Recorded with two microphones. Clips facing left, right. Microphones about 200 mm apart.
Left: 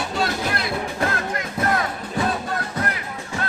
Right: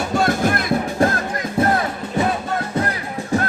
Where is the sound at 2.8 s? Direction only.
25° right (ahead or behind).